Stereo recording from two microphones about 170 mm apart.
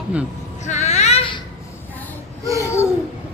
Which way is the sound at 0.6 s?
45° left (ahead or behind).